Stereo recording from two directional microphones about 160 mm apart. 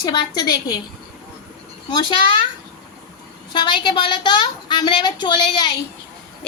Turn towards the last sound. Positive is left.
turn(degrees=25)  # may be behind; listen again after turning